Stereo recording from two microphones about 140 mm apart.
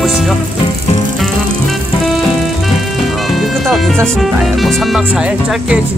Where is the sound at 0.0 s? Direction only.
Centre (ahead or behind).